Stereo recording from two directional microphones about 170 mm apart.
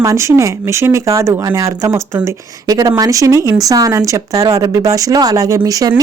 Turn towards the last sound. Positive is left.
turn(degrees=-20)  # may be behind; listen again after turning